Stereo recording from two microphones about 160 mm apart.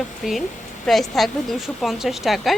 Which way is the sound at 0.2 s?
Centre (ahead or behind).